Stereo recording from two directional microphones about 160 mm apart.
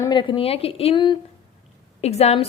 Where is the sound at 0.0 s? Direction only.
30° left (ahead or behind).